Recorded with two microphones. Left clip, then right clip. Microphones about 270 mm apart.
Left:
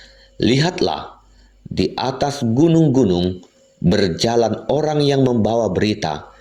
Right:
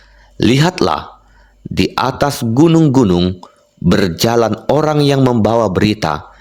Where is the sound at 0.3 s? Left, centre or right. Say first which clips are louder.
Right 4 dB; right.